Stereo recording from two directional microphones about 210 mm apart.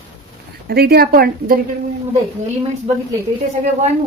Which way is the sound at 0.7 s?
50° right (ahead or behind).